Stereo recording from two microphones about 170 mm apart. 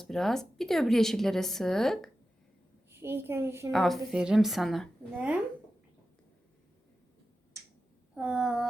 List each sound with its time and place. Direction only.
0.0 s a woman's voice: centre (ahead or behind)
2.9 s a child's voice: 15° right (ahead or behind)
3.7 s a woman's voice: centre (ahead or behind)
7.6 s finger snapping: 15° right (ahead or behind)
8.1 s a woman's voice: 5° right (ahead or behind)